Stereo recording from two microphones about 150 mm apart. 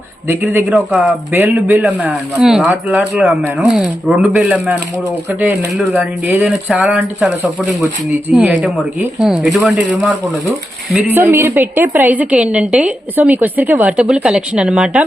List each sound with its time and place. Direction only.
0.7 s speech: 5° right (ahead or behind)
1.3 s a woman's voice: 15° right (ahead or behind)
6.0 s a woman's voice: 15° right (ahead or behind)
11.0 s a woman's voice: 15° right (ahead or behind)